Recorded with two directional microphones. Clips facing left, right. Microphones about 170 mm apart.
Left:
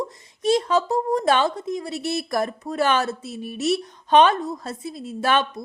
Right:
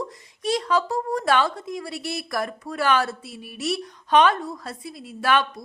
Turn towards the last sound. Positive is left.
turn(degrees=25)  # may be behind; listen again after turning